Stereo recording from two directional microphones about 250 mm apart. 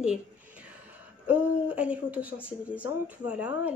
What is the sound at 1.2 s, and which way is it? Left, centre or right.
Speech, centre.